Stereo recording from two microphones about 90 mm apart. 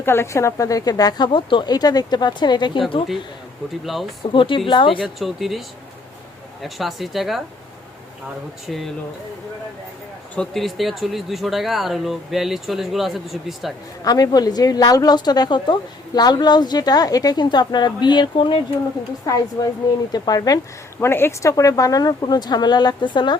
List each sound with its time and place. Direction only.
0.0 s a woman's voice: 25° left (ahead or behind); by 1.3 s 45° left (ahead or behind)
1.3 s a woman's voice: 65° left (ahead or behind)
4.3 s speech: 65° left (ahead or behind)
4.9 s speech: centre (ahead or behind)
8.6 s speech: centre (ahead or behind)
10.3 s speech: 5° left (ahead or behind)
14.0 s a woman's voice: 45° left (ahead or behind); by 18.6 s 65° left (ahead or behind)
19.3 s a woman's voice: 40° left (ahead or behind)
21.0 s a woman's voice: 25° left (ahead or behind)
21.5 s a woman's voice: 40° left (ahead or behind); by 23.4 s 55° left (ahead or behind)